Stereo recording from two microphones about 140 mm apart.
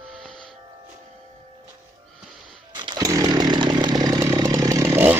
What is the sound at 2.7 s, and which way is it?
Chainsaw, 30° right (ahead or behind).